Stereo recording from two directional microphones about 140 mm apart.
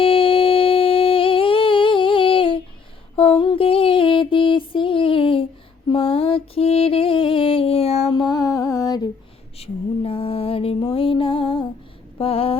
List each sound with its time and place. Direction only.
0.0 s music: 40° left (ahead or behind)
5.9 s mantra: 40° left (ahead or behind); by 9.0 s 25° left (ahead or behind)
9.6 s music: 40° left (ahead or behind)
12.1 s a sound: 45° left (ahead or behind)